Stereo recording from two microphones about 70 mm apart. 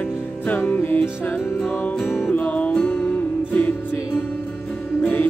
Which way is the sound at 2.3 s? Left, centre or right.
Left.